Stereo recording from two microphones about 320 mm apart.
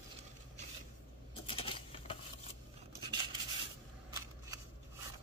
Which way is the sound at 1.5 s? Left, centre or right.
Centre.